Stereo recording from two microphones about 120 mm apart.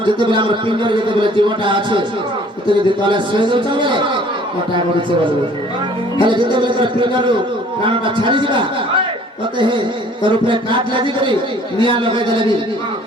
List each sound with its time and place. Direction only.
0.0 s a man's voice: 45° right (ahead or behind)
6.2 s a man's voice: 40° right (ahead or behind)